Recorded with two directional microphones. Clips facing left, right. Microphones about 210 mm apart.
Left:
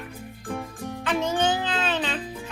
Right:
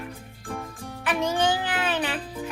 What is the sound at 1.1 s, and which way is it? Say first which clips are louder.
A child's voice: even; 15° right (ahead or behind).